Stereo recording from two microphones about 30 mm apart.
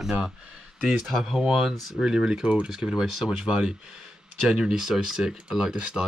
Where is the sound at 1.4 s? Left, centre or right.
Centre.